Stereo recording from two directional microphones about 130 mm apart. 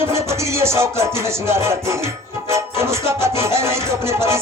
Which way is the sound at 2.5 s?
20° right (ahead or behind).